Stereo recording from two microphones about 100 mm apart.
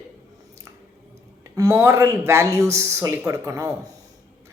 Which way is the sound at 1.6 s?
30° right (ahead or behind).